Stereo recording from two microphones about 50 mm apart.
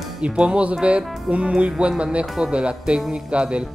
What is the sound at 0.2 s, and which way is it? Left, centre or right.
Speech, right.